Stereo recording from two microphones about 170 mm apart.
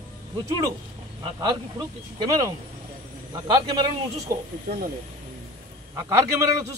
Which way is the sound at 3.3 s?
20° right (ahead or behind).